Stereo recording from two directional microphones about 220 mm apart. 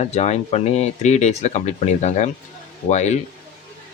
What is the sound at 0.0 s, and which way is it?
Speech, 30° left (ahead or behind).